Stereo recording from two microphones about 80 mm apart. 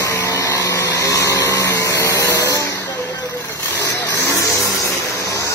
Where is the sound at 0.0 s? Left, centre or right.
Left.